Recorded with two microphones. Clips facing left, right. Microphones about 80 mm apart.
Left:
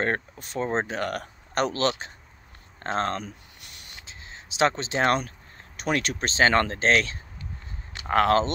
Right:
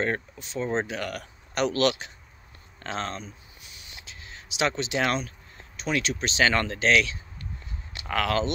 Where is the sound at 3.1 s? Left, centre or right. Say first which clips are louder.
Left 5 dB; left.